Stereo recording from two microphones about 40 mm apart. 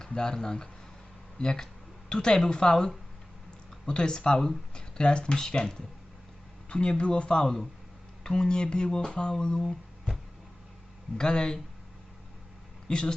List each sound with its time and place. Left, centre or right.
0.0 s speech: centre
6.7 s speech: left
11.2 s speech: centre
12.9 s speech: left